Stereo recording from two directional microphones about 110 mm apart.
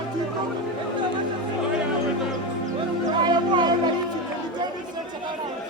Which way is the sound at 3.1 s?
45° right (ahead or behind).